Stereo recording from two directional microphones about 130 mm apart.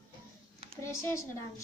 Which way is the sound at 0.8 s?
20° left (ahead or behind).